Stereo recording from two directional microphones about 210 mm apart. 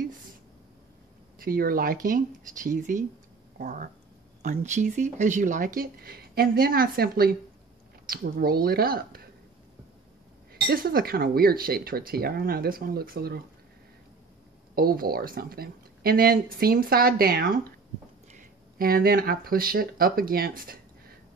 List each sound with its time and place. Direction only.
1.4 s speech: 45° right (ahead or behind)
10.5 s speech: 45° right (ahead or behind)
14.8 s speech: 45° right (ahead or behind)